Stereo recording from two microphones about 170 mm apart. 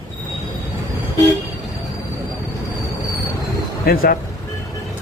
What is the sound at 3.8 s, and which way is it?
Speech, 60° left (ahead or behind).